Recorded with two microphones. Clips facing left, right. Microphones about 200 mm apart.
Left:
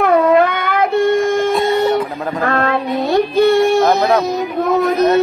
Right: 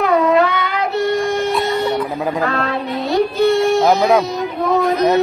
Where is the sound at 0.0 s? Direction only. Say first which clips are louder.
Left 2 dB; 50° left (ahead or behind).